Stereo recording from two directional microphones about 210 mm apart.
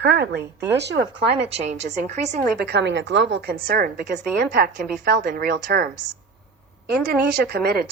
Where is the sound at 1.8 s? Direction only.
30° right (ahead or behind).